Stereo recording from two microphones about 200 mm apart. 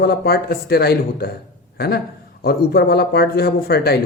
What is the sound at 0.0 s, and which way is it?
A man's voice, 50° left (ahead or behind).